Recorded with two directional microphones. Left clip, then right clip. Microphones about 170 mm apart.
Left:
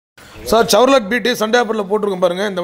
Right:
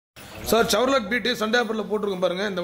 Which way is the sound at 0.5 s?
25° left (ahead or behind).